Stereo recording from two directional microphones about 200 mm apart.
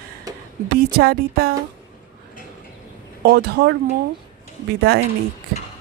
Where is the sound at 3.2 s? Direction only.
55° right (ahead or behind).